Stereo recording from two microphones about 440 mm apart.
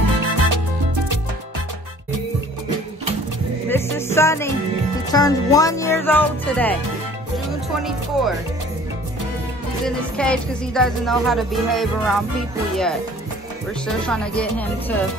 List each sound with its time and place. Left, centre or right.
0.0 s music: right
3.6 s music: centre
9.8 s music: centre
14.0 s music: centre